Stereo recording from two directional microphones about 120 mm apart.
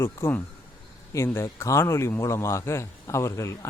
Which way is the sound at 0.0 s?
20° left (ahead or behind).